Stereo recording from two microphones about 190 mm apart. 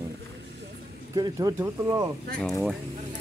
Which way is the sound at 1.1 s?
20° right (ahead or behind).